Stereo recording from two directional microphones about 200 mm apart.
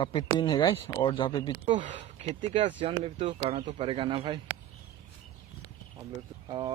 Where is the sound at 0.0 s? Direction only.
25° left (ahead or behind).